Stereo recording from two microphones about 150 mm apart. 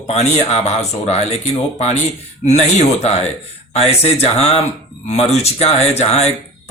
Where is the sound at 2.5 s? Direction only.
45° left (ahead or behind).